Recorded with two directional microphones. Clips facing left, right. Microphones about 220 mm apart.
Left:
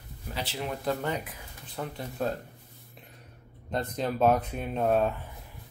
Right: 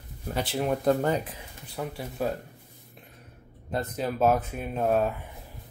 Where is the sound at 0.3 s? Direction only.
50° right (ahead or behind).